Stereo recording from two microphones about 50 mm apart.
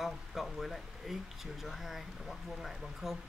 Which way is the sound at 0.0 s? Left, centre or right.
Centre.